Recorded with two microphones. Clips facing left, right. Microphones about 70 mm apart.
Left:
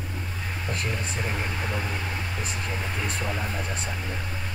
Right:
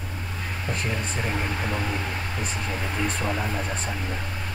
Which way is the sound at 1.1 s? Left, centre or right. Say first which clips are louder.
Right 2 dB; right.